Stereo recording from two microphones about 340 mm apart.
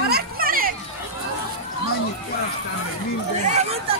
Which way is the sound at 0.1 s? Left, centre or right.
Right.